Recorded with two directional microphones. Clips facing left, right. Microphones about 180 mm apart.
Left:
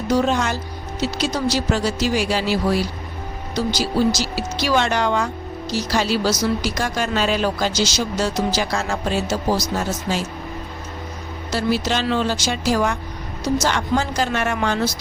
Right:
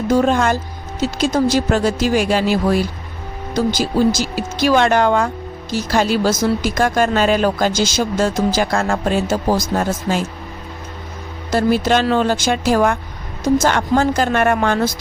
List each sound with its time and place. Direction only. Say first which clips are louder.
0.1 s speech: right 4 dB; 50° right (ahead or behind)
11.5 s speech: right 6 dB; 50° right (ahead or behind)